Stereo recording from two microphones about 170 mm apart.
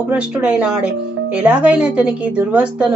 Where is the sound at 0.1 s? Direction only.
5° right (ahead or behind).